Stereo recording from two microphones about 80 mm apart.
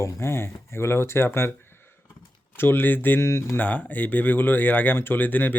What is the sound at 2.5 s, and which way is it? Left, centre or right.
Speech, left.